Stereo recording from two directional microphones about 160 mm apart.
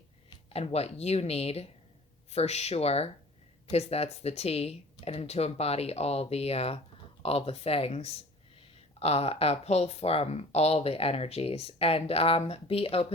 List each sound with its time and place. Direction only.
0.3 s speech: 40° left (ahead or behind)